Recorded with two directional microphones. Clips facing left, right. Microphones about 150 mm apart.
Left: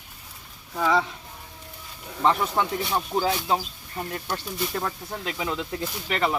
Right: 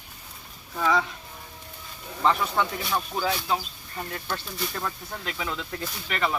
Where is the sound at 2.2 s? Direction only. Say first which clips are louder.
Left 1 dB; 20° left (ahead or behind).